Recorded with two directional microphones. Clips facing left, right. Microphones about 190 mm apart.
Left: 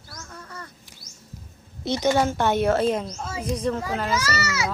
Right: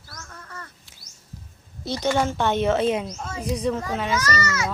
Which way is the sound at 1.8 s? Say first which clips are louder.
Left 2 dB; 20° left (ahead or behind).